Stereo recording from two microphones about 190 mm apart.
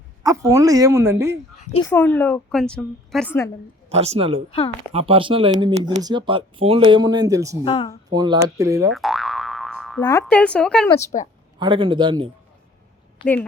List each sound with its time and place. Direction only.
0.2 s speech: 20° right (ahead or behind)
1.5 s a child's voice: 35° left (ahead or behind)
1.9 s a woman's voice: 10° left (ahead or behind)
3.8 s speech: 35° right (ahead or behind); by 7.6 s 15° right (ahead or behind)
7.6 s speech: 25° left (ahead or behind)
8.1 s speech: 20° right (ahead or behind)
8.9 s boing: centre (ahead or behind)
10.0 s a woman's voice: 15° left (ahead or behind)
10.2 s speech: 5° left (ahead or behind)
11.6 s speech: 25° right (ahead or behind)